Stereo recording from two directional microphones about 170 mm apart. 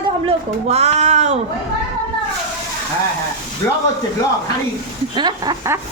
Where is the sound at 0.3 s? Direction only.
40° right (ahead or behind).